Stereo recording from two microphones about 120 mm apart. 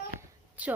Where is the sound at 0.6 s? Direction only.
10° right (ahead or behind).